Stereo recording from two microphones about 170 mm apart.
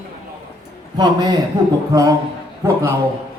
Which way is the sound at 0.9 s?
25° right (ahead or behind).